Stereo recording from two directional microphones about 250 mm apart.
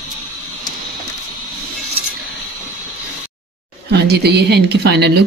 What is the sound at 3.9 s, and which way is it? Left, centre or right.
Speech, right.